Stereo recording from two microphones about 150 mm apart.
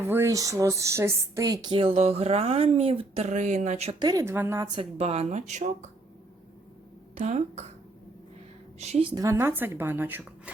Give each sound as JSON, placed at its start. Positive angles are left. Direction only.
{"t": 0.0, "sound": "a woman's voice", "side_deg": -15}
{"t": 1.6, "sound": "speech", "side_deg": -35}
{"t": 4.0, "sound": "a woman's voice", "side_deg": -20}
{"t": 4.8, "sound": "speech", "side_deg": -40}
{"t": 7.2, "sound": "speech", "side_deg": -50}
{"t": 8.8, "sound": "speech", "side_deg": -45}
{"t": 9.1, "sound": "speech", "side_deg": -20}